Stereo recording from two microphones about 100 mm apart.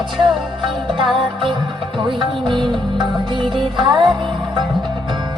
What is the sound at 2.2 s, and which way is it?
Music, 50° right (ahead or behind).